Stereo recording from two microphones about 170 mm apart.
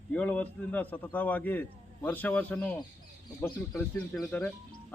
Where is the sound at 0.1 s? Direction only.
10° left (ahead or behind).